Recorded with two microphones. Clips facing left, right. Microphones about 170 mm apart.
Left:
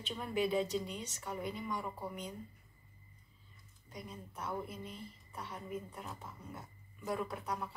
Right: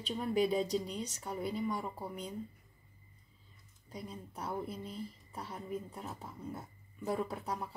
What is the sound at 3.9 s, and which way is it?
A woman's voice, 30° right (ahead or behind).